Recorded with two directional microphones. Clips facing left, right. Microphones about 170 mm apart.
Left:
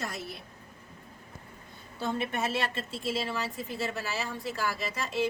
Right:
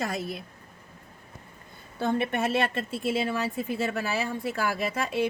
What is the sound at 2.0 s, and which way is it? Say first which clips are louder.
A woman's voice: right 5 dB; 55° right (ahead or behind).